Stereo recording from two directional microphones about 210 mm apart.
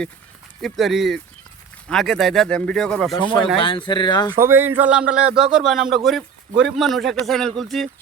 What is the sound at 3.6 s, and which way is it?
Speech, 25° left (ahead or behind).